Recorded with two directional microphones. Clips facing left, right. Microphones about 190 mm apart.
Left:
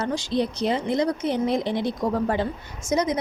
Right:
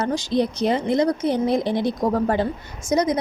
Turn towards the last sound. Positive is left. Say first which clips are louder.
# right 3 dB
turn(degrees=-35)  # may be behind; listen again after turning